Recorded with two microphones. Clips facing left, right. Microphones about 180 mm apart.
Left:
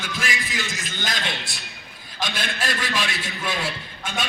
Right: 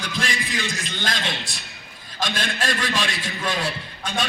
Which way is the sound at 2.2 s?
5° left (ahead or behind).